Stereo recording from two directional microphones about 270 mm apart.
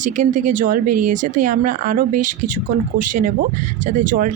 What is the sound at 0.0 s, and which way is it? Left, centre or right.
Speech, right.